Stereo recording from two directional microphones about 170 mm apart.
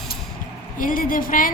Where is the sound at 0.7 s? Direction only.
55° left (ahead or behind).